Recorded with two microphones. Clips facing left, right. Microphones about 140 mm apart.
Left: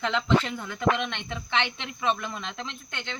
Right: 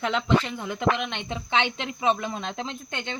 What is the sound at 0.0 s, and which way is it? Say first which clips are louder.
Speech: right 1 dB; 10° right (ahead or behind).